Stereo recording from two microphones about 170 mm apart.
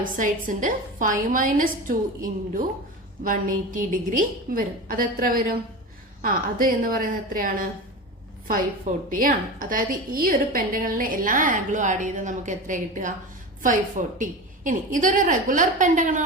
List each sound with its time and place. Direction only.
0.0 s a woman's voice: 50° right (ahead or behind)
3.2 s a woman's voice: 50° right (ahead or behind)
14.2 s a woman's voice: 50° right (ahead or behind)